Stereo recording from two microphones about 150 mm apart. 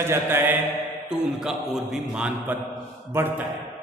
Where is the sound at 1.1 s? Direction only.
5° right (ahead or behind).